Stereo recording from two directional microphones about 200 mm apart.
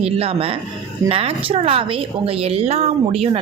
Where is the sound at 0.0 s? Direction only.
30° right (ahead or behind).